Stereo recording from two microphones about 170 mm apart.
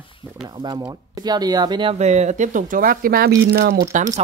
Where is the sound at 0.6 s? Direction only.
25° right (ahead or behind); by 3.3 s 60° right (ahead or behind).